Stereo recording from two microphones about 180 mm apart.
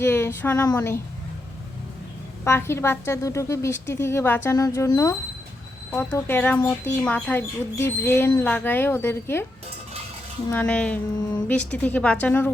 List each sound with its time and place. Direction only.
0.0 s speech: 10° left (ahead or behind)
2.4 s speech: 15° left (ahead or behind)
10.5 s speech: 5° left (ahead or behind)